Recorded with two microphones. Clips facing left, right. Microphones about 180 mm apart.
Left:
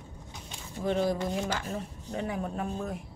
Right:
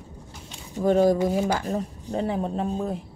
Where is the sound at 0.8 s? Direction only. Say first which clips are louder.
Right 9 dB; 45° right (ahead or behind).